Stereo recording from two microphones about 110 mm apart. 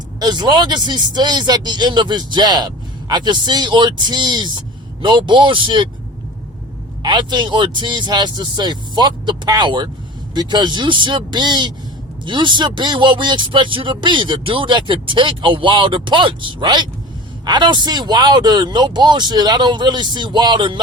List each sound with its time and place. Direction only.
0.2 s speech: 40° right (ahead or behind)
7.0 s speech: 40° right (ahead or behind)